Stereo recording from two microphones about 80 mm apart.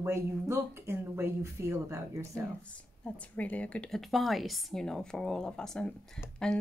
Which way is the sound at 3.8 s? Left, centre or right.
Centre.